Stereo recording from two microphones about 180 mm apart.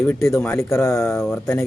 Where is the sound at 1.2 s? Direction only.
Centre (ahead or behind).